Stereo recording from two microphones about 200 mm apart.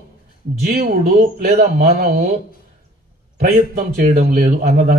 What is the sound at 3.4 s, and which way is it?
A man's voice, 50° right (ahead or behind).